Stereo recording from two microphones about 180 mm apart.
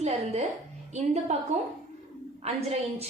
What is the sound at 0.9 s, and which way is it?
A woman's voice, 40° right (ahead or behind).